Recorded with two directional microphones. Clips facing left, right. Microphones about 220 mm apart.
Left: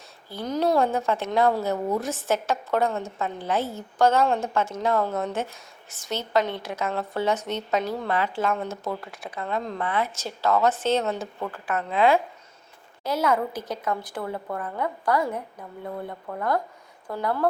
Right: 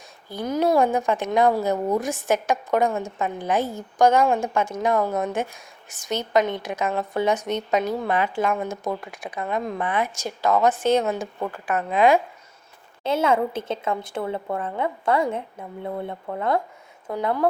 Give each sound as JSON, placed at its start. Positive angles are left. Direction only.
{"t": 0.3, "sound": "speech", "side_deg": -10}
{"t": 13.0, "sound": "a woman's voice", "side_deg": -25}